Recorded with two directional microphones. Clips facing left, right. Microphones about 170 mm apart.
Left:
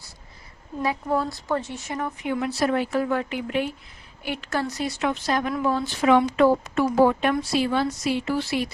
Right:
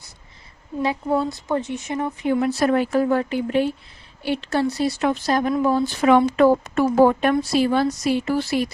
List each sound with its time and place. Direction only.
0.8 s a woman's voice: 25° right (ahead or behind)
2.2 s speech: 40° right (ahead or behind)